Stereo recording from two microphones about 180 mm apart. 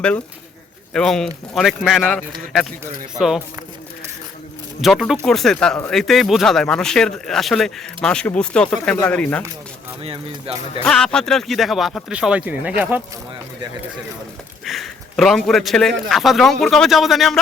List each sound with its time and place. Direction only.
0.9 s speech: centre (ahead or behind)
4.8 s speech: centre (ahead or behind)
10.0 s speech: 30° right (ahead or behind)
10.8 s speech: 5° left (ahead or behind)
14.6 s speech: centre (ahead or behind)